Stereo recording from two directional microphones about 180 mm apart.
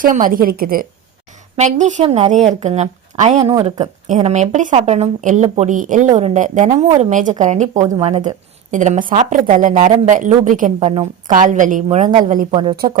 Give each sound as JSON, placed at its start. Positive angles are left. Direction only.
{"t": 0.0, "sound": "a woman's voice", "side_deg": -50}
{"t": 1.5, "sound": "a woman's voice", "side_deg": -40}